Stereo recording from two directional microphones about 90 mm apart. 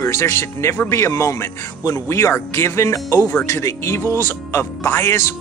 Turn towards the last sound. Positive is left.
turn(degrees=30)  # may be behind; listen again after turning